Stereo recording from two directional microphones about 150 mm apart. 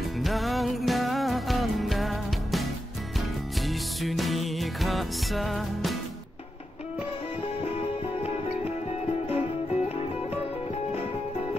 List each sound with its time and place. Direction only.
0.2 s music: centre (ahead or behind)
3.6 s music: centre (ahead or behind)
8.2 s music: 45° left (ahead or behind)